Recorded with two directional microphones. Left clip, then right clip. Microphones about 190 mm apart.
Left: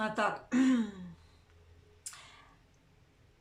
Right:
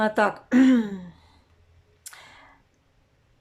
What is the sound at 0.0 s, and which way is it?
Speech, 40° right (ahead or behind).